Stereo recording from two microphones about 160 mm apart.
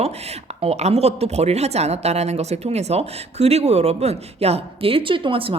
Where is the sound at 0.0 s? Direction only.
40° right (ahead or behind).